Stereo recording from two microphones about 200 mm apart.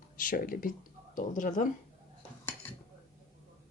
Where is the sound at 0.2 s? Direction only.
45° left (ahead or behind).